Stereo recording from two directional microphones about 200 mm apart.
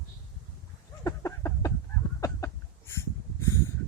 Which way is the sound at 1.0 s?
15° left (ahead or behind).